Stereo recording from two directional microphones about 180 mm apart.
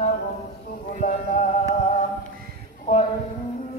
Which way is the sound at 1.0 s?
50° left (ahead or behind).